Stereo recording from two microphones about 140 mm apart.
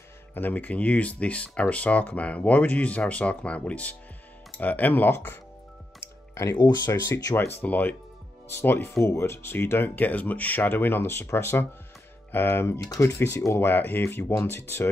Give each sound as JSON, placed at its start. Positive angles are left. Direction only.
{"t": 0.3, "sound": "speech", "side_deg": 10}
{"t": 6.5, "sound": "speech", "side_deg": 30}